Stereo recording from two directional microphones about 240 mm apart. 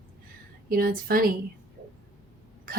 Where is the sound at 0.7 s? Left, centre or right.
Right.